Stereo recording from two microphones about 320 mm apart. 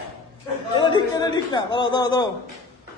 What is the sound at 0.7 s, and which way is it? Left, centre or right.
Speech, centre.